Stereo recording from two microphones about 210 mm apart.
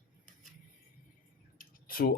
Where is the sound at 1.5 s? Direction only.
40° left (ahead or behind).